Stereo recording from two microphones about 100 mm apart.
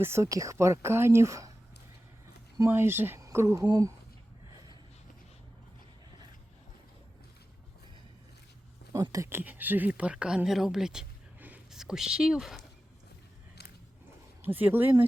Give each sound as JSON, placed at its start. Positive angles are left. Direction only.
{"t": 0.0, "sound": "speech", "side_deg": -30}
{"t": 2.6, "sound": "speech", "side_deg": -25}
{"t": 4.5, "sound": "a sound", "side_deg": -45}
{"t": 8.9, "sound": "speech", "side_deg": -35}
{"t": 9.4, "sound": "speech", "side_deg": -20}
{"t": 11.3, "sound": "a sound", "side_deg": -15}
{"t": 11.7, "sound": "speech", "side_deg": -5}
{"t": 14.4, "sound": "speech", "side_deg": -20}